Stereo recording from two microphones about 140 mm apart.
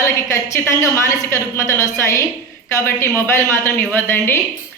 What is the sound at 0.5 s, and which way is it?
A woman's voice, 20° left (ahead or behind).